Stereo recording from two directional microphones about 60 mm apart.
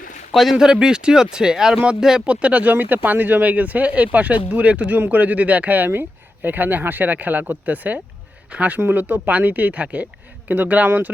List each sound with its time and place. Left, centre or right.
0.3 s speech: centre
0.5 s speech: centre; by 11.1 s right